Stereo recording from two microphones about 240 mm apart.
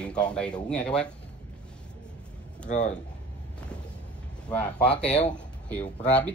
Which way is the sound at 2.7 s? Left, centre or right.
Left.